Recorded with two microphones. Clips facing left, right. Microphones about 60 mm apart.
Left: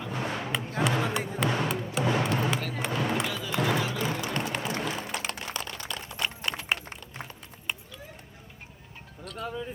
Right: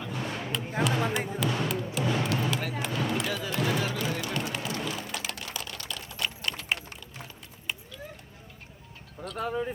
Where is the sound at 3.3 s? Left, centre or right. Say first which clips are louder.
Right 2 dB; right.